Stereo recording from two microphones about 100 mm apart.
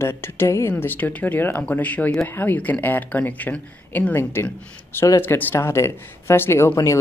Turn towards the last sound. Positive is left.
turn(degrees=30)  # may be behind; listen again after turning